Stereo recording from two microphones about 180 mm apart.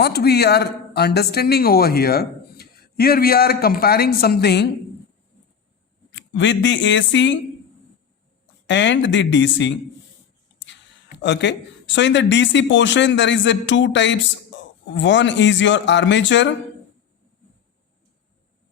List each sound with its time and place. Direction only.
0.0 s speech: 60° left (ahead or behind)
6.1 s speech: 90° left
8.6 s speech: 85° left
11.2 s speech: 75° left (ahead or behind)